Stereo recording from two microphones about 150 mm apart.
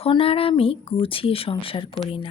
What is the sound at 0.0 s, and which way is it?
A woman's voice, 40° left (ahead or behind).